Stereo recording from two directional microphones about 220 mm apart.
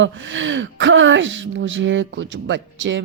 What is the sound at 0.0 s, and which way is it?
Speech, 55° right (ahead or behind).